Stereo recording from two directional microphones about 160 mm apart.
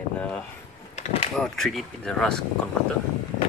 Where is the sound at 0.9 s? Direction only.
45° left (ahead or behind).